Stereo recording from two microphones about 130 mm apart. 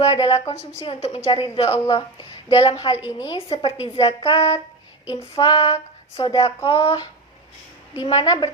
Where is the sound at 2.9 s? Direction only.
40° left (ahead or behind).